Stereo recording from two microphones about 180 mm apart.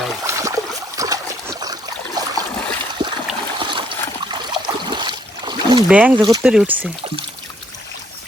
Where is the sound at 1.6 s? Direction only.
20° right (ahead or behind).